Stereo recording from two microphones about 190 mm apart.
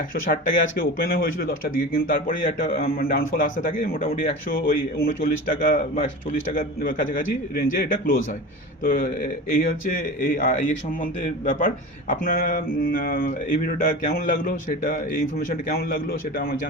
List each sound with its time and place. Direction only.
0.1 s a man's voice: 45° left (ahead or behind)